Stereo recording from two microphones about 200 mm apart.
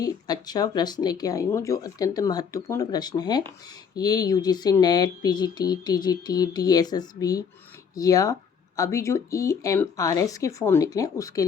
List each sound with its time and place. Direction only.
0.0 s speech: 20° left (ahead or behind)